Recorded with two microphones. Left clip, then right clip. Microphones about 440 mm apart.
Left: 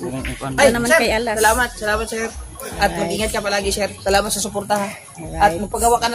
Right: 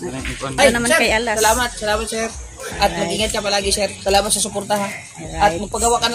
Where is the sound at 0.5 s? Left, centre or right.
Left.